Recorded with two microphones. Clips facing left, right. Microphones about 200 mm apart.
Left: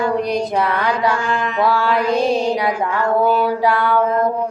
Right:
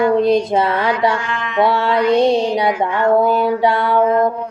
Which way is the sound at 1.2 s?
40° left (ahead or behind).